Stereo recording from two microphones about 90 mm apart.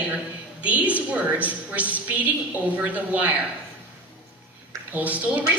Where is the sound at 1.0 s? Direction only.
15° right (ahead or behind).